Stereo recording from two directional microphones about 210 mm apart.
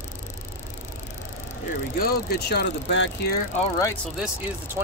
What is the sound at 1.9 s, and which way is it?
Speech, 50° left (ahead or behind).